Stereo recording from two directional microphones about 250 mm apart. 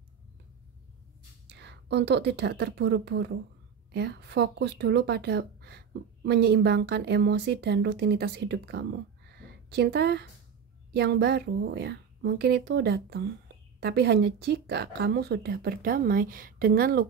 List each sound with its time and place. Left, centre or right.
1.5 s a woman's voice: right